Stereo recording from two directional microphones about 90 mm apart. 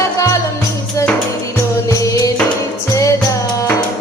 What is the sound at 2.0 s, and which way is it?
Music, 40° left (ahead or behind).